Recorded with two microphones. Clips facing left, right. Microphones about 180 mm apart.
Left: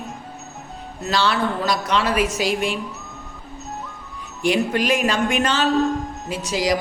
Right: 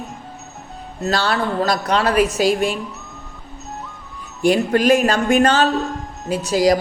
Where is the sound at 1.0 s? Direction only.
40° right (ahead or behind).